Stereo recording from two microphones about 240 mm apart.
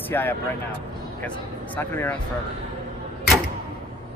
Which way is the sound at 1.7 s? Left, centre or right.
Centre.